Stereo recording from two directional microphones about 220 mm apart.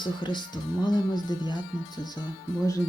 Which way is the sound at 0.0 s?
20° left (ahead or behind).